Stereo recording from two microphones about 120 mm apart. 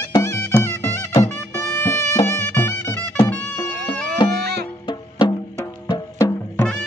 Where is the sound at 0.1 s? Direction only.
25° left (ahead or behind).